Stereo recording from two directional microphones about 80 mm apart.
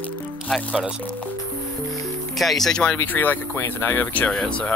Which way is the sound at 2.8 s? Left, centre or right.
Left.